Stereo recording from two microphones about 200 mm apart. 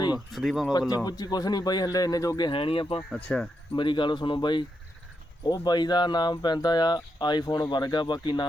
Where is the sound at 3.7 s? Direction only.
25° left (ahead or behind).